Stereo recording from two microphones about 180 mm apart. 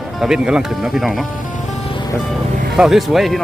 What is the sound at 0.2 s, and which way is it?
Speech, 5° right (ahead or behind).